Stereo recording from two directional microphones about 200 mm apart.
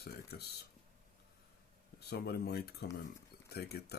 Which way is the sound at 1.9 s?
50° left (ahead or behind).